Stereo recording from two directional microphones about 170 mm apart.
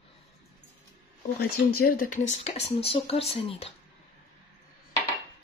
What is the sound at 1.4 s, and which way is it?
Speech, 65° left (ahead or behind).